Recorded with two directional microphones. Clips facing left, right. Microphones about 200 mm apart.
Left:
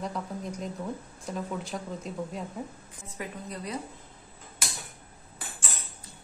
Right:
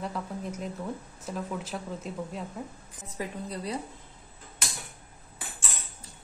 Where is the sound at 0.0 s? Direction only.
5° right (ahead or behind).